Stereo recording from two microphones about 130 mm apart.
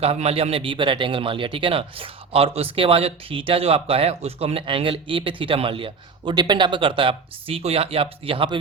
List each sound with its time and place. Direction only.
0.0 s a man's voice: 55° right (ahead or behind)